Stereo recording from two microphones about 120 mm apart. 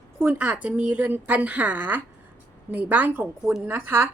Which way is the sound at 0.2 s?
15° right (ahead or behind).